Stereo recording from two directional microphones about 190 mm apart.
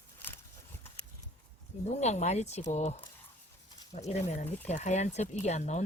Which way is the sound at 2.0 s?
35° left (ahead or behind).